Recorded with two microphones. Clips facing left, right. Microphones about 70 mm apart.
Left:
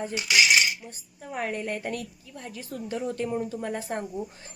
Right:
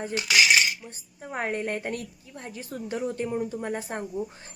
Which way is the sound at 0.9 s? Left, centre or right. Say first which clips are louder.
Right 1 dB; right.